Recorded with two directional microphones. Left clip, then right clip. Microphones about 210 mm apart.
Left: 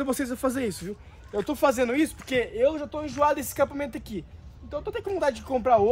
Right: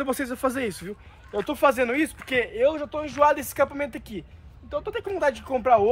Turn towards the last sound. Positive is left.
turn(degrees=5)  # may be behind; listen again after turning